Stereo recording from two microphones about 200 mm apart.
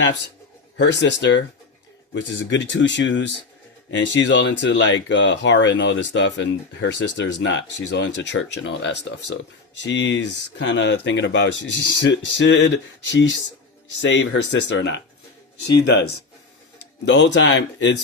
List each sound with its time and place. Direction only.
0.8 s speech: 65° left (ahead or behind)
17.1 s speech: 65° left (ahead or behind)